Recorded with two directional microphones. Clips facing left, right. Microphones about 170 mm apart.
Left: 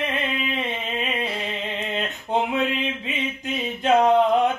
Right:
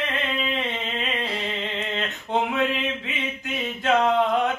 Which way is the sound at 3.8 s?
20° left (ahead or behind).